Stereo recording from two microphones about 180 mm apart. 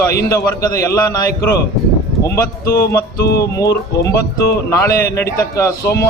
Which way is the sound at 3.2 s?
60° left (ahead or behind).